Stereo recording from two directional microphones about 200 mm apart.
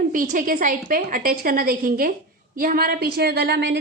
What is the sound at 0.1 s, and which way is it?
A woman's voice, 40° right (ahead or behind).